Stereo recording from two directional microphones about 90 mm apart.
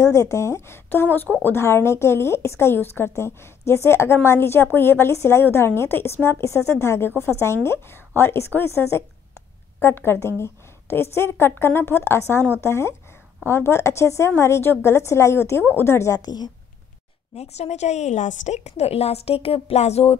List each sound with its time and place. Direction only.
0.0 s speech: 35° left (ahead or behind)
16.2 s a woman's voice: 50° left (ahead or behind)
18.9 s a woman's voice: 90° left